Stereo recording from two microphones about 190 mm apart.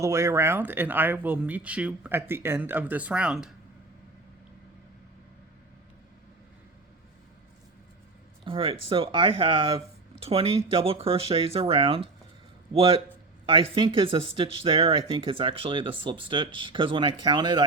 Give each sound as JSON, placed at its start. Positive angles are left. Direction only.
{"t": 0.0, "sound": "speech", "side_deg": -15}
{"t": 8.4, "sound": "speech", "side_deg": -30}